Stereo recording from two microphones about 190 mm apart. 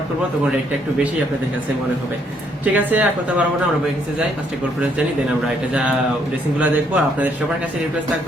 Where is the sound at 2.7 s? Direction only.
10° right (ahead or behind).